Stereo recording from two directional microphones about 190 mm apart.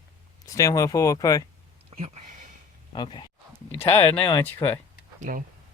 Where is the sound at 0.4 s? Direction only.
15° left (ahead or behind).